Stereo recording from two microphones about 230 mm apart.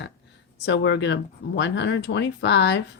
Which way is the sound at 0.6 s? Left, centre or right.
Left.